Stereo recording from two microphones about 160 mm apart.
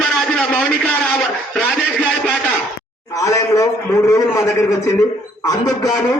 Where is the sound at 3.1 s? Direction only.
20° left (ahead or behind).